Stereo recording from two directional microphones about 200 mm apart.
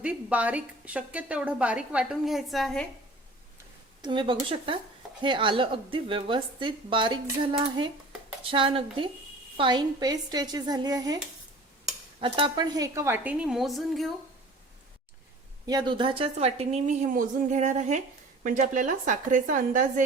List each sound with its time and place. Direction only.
0.0 s a woman's voice: 5° right (ahead or behind)
4.0 s a woman's voice: 25° right (ahead or behind)
8.4 s a woman's voice: 25° right (ahead or behind)
12.2 s speech: 25° right (ahead or behind); by 14.1 s centre (ahead or behind)
15.6 s speech: 20° right (ahead or behind); by 19.8 s 40° right (ahead or behind)